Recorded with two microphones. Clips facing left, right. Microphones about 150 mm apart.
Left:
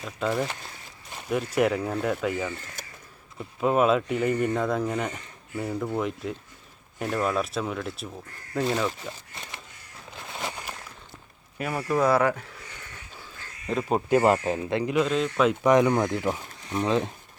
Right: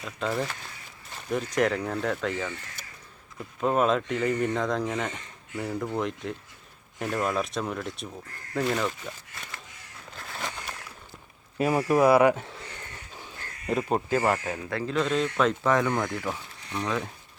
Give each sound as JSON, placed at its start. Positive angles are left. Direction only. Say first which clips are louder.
{"t": 0.0, "sound": "speech", "louder": "left 2 dB", "side_deg": 5}
{"t": 1.5, "sound": "speech", "louder": "left 2 dB", "side_deg": 5}
{"t": 3.6, "sound": "speech", "louder": "left 2 dB", "side_deg": 5}
{"t": 10.2, "sound": "a sound", "louder": "left 2 dB", "side_deg": 20}
{"t": 11.7, "sound": "speech", "louder": "right 3 dB", "side_deg": -15}
{"t": 13.1, "sound": "crow", "louder": "right 3 dB", "side_deg": -20}
{"t": 13.7, "sound": "speech", "louder": "right 1 dB", "side_deg": -10}
{"t": 14.1, "sound": "speech", "louder": "left 9 dB", "side_deg": 20}
{"t": 15.0, "sound": "speech", "louder": "left 1 dB", "side_deg": 0}
{"t": 15.6, "sound": "speech", "louder": "left 5 dB", "side_deg": 15}